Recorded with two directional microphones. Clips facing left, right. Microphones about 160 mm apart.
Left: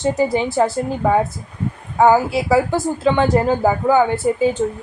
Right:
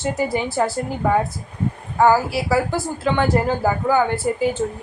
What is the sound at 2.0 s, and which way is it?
A woman's voice, 20° left (ahead or behind).